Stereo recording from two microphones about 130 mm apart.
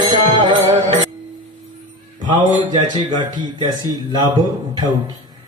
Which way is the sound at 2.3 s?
35° right (ahead or behind).